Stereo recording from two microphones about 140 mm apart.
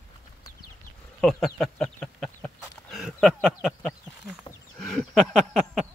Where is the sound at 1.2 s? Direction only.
Centre (ahead or behind).